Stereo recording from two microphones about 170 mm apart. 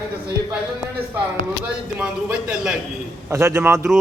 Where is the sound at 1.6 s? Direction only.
5° right (ahead or behind).